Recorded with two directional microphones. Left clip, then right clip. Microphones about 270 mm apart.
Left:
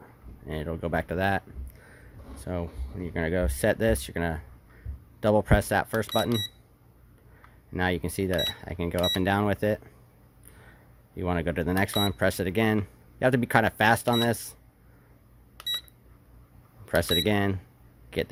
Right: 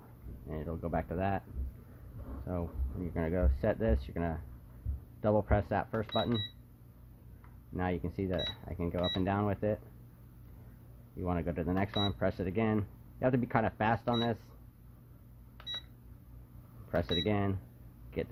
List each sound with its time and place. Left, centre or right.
0.4 s speech: left
7.7 s speech: left
11.2 s speech: left
16.9 s speech: left